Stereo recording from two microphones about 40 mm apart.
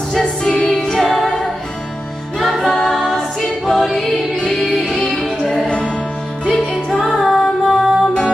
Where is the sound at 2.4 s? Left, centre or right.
Centre.